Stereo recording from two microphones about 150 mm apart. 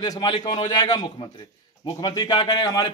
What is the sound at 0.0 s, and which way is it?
A man's voice, 30° left (ahead or behind).